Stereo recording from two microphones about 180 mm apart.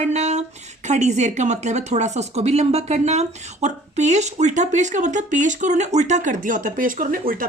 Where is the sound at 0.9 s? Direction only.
40° right (ahead or behind).